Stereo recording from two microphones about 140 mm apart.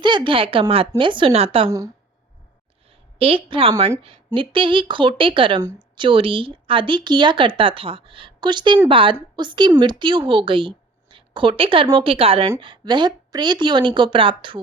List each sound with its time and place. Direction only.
0.0 s speech: 35° right (ahead or behind)
3.2 s speech: 40° right (ahead or behind)